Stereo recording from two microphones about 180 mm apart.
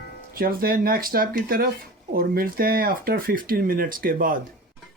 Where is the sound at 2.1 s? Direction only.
55° right (ahead or behind).